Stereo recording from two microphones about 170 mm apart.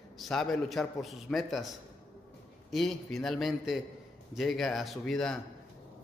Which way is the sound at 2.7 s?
Centre (ahead or behind).